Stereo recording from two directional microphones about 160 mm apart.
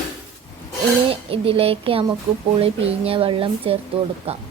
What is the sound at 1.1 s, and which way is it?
A woman's voice, 35° right (ahead or behind).